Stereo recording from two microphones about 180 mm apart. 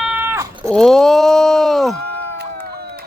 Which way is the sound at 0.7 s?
Centre (ahead or behind).